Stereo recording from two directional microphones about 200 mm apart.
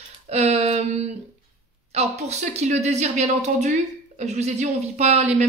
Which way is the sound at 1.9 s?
35° right (ahead or behind).